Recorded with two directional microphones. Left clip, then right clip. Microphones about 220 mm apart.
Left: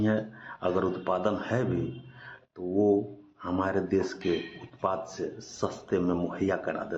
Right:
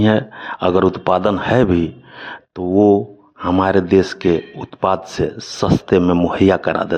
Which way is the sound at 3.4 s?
40° right (ahead or behind).